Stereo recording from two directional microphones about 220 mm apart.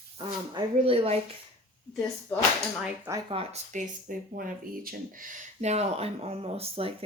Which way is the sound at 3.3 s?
25° right (ahead or behind).